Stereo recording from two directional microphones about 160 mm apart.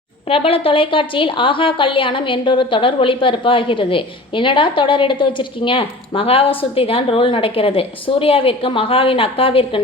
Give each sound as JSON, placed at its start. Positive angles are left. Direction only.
{"t": 0.3, "sound": "a woman's voice", "side_deg": 35}